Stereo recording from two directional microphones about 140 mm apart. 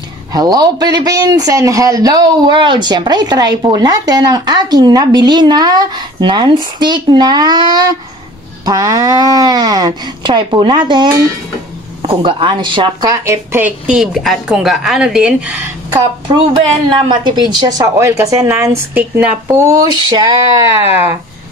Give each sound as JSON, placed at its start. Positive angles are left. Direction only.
{"t": 0.3, "sound": "a man's voice", "side_deg": -30}
{"t": 15.9, "sound": "a man's voice", "side_deg": -35}
{"t": 20.1, "sound": "a man's voice", "side_deg": -30}